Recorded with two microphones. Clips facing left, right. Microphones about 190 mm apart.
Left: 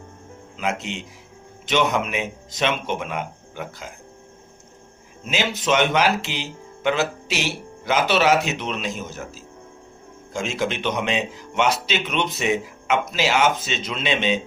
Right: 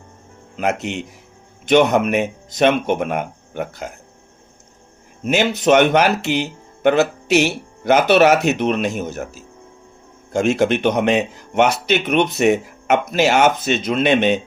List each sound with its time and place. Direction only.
0.5 s speech: 60° right (ahead or behind)
5.2 s speech: 60° right (ahead or behind)